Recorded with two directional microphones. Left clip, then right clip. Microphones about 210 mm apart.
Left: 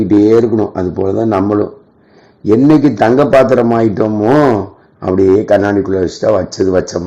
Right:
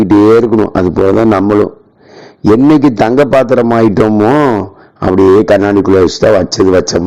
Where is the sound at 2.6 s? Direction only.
30° right (ahead or behind).